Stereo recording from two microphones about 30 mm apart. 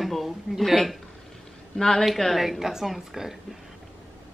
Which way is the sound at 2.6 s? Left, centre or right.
Centre.